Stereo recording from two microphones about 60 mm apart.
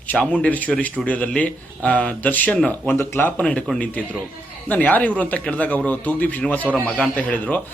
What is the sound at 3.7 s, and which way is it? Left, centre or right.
Speech, left.